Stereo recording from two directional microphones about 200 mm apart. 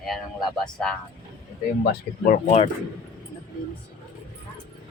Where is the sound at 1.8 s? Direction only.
50° left (ahead or behind).